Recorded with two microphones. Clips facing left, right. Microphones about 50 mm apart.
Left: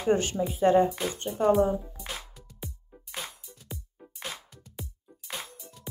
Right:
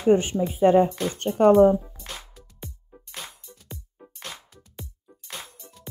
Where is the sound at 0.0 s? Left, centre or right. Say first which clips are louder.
Right 5 dB; centre.